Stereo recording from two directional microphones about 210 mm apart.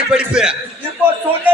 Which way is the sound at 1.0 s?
5° right (ahead or behind).